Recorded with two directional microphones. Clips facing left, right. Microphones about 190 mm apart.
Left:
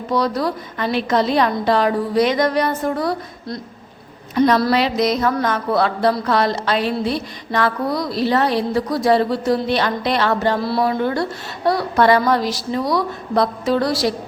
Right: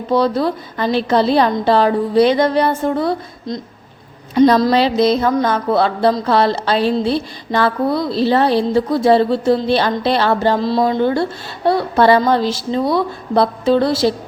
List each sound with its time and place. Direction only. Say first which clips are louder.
0.1 s a woman's voice: right 4 dB; 25° right (ahead or behind)
4.4 s music: right 4 dB; 30° right (ahead or behind)
4.7 s a woman's voice: right 4 dB; 30° right (ahead or behind)
9.9 s music: right 3 dB; 30° right (ahead or behind)
10.6 s a woman's voice: right 4 dB; 20° right (ahead or behind)